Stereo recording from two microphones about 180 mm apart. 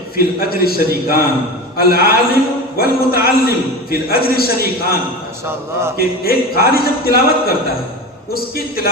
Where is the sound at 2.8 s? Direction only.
60° left (ahead or behind).